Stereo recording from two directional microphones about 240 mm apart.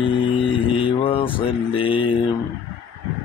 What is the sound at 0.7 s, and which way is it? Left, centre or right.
Mantra, left.